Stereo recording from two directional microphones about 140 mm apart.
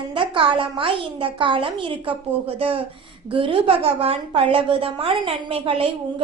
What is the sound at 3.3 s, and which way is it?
A woman's voice, 35° right (ahead or behind).